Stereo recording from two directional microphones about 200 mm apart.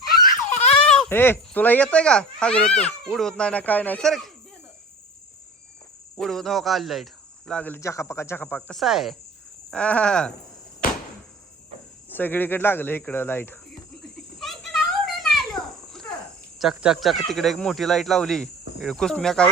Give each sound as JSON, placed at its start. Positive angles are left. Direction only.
{"t": 0.5, "sound": "dog", "side_deg": 35}
{"t": 0.9, "sound": "speech", "side_deg": 5}
{"t": 6.1, "sound": "speech", "side_deg": 0}
{"t": 12.0, "sound": "speech", "side_deg": 10}
{"t": 14.3, "sound": "a sound", "side_deg": 0}
{"t": 16.6, "sound": "speech", "side_deg": 0}